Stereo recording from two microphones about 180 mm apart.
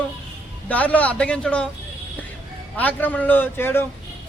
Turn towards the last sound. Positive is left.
turn(degrees=10)  # may be behind; listen again after turning